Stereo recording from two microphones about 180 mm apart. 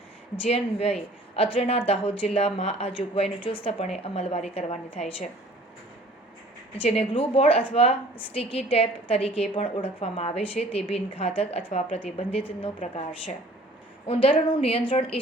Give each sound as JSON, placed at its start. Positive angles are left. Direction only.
{"t": 0.4, "sound": "a woman's voice", "side_deg": 35}
{"t": 6.7, "sound": "a woman's voice", "side_deg": 30}